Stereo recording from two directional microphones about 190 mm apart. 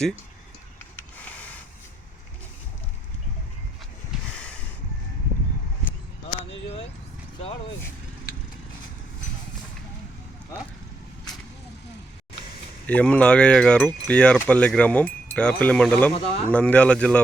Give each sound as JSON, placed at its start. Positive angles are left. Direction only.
{"t": 1.1, "sound": "printer", "side_deg": 10}
{"t": 4.3, "sound": "a sound", "side_deg": 5}
{"t": 12.9, "sound": "speech", "side_deg": 5}